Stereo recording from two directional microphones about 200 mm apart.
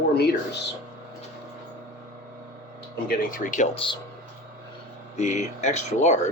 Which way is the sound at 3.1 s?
40° left (ahead or behind).